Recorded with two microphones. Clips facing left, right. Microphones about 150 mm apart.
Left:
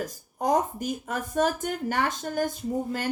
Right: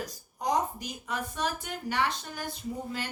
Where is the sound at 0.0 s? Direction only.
50° left (ahead or behind).